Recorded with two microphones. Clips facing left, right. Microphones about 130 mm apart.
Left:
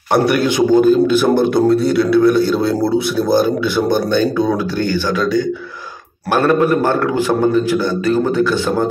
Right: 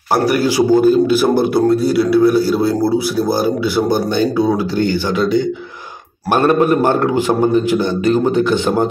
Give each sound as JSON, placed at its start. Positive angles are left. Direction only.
{"t": 0.1, "sound": "a man's voice", "side_deg": -5}
{"t": 6.3, "sound": "a man's voice", "side_deg": -20}